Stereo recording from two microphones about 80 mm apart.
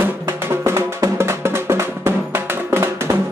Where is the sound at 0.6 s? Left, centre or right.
Right.